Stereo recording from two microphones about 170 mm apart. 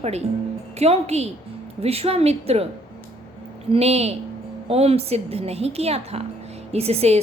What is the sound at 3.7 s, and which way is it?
A woman's voice, 35° right (ahead or behind).